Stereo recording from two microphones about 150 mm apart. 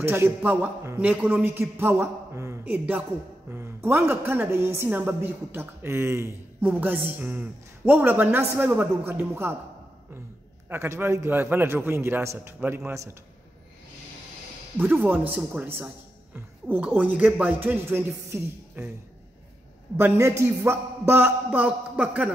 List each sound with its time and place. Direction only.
0.0 s a woman's voice: 15° right (ahead or behind)
10.7 s a woman's voice: 15° right (ahead or behind)
14.8 s a woman's voice: 15° right (ahead or behind)
20.0 s a woman's voice: 20° right (ahead or behind)